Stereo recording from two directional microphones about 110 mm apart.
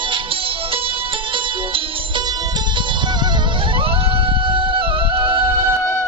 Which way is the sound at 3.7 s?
55° right (ahead or behind).